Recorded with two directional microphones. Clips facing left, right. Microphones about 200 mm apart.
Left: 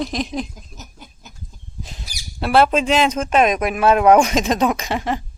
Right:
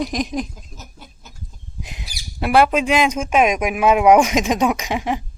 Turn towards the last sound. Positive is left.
turn(degrees=-10)  # may be behind; listen again after turning